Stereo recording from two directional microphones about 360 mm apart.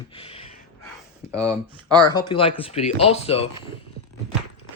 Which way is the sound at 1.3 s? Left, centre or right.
Centre.